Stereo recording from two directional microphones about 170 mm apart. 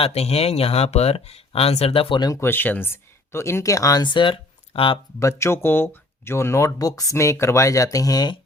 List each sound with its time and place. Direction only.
0.0 s speech: 40° left (ahead or behind)
5.2 s speech: 15° left (ahead or behind)